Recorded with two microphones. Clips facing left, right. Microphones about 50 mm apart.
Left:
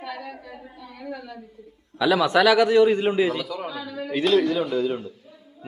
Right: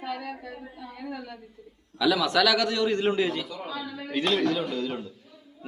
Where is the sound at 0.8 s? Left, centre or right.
Centre.